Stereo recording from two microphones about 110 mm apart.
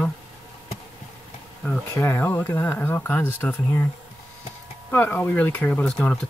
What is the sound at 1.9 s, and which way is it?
Speech, 20° left (ahead or behind).